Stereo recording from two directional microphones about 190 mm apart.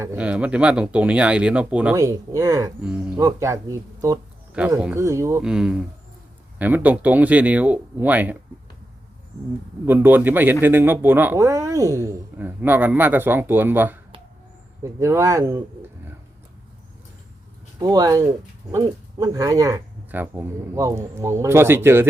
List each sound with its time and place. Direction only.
0.0 s speech: 10° right (ahead or behind)
4.5 s speech: 5° right (ahead or behind)
5.4 s speech: 5° right (ahead or behind)
9.8 s speech: 10° right (ahead or behind)
17.7 s speech: 20° right (ahead or behind)